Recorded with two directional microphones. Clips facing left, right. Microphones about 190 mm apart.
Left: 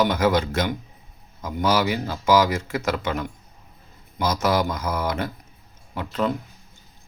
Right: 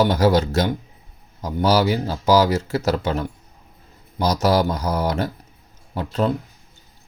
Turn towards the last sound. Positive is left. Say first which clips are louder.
# right 3 dB
turn(degrees=-35)  # may be behind; listen again after turning